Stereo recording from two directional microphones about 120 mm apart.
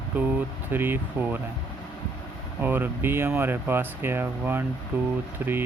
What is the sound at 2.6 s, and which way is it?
Speech, 15° right (ahead or behind).